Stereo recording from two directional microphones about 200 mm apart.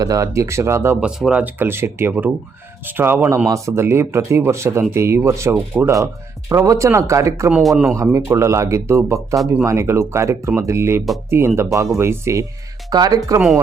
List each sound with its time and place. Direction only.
0.0 s speech: 15° right (ahead or behind)
7.6 s a man's voice: centre (ahead or behind)
7.9 s speech: 15° right (ahead or behind)